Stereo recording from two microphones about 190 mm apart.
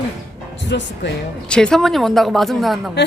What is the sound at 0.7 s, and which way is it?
Speech, 65° left (ahead or behind).